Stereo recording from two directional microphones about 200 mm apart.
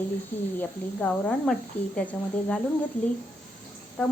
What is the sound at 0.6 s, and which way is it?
A woman's voice, 10° left (ahead or behind).